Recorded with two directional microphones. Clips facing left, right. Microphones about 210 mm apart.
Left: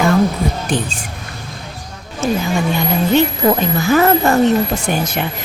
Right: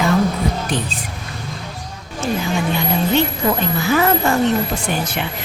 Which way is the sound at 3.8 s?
45° left (ahead or behind).